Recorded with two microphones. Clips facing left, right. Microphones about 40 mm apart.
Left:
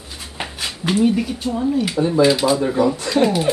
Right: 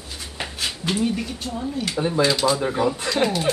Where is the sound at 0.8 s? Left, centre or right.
Centre.